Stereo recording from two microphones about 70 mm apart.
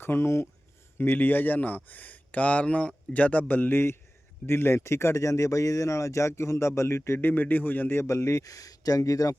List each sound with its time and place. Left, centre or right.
0.0 s speech: left
8.0 s speech: left